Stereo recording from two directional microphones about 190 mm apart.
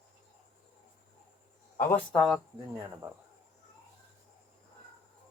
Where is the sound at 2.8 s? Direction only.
10° right (ahead or behind).